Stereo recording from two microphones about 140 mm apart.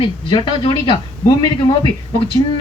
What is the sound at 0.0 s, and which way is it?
Speech, 35° left (ahead or behind).